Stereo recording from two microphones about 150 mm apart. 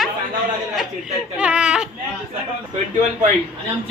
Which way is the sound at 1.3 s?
5° right (ahead or behind).